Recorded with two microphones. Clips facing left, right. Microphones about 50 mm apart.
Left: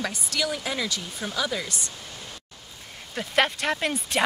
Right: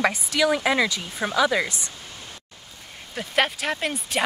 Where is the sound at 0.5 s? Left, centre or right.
Right.